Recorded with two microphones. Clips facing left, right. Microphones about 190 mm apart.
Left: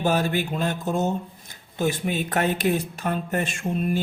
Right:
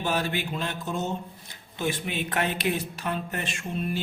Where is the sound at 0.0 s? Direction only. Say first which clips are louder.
Left 5 dB; 45° left (ahead or behind).